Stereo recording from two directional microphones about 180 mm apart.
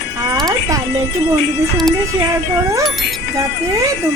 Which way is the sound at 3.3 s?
20° right (ahead or behind).